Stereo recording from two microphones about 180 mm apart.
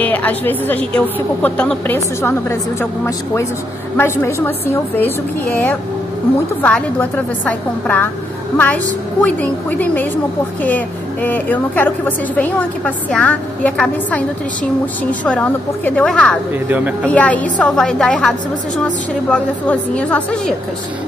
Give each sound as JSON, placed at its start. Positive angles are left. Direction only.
{"t": 0.0, "sound": "a woman's voice", "side_deg": 10}
{"t": 3.9, "sound": "a woman's voice", "side_deg": 15}
{"t": 11.2, "sound": "a woman's voice", "side_deg": 10}
{"t": 16.5, "sound": "speech", "side_deg": -10}
{"t": 17.0, "sound": "a woman's voice", "side_deg": 5}
{"t": 19.3, "sound": "a woman's voice", "side_deg": 5}